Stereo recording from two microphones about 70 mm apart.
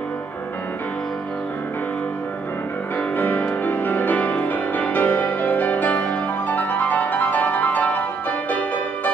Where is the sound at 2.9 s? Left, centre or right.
Left.